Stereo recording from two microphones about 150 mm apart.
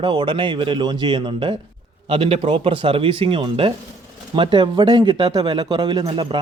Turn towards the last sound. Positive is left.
turn(degrees=-35)  # may be behind; listen again after turning